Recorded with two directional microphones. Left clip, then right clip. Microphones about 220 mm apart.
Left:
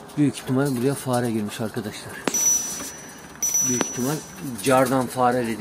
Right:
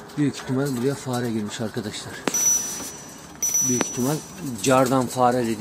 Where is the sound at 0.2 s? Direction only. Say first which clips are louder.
Left 2 dB; 20° left (ahead or behind).